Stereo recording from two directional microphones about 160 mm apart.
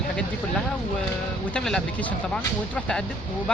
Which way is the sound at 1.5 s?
5° left (ahead or behind).